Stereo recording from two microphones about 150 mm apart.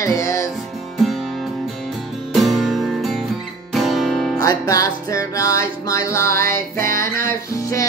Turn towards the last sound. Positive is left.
turn(degrees=20)  # may be behind; listen again after turning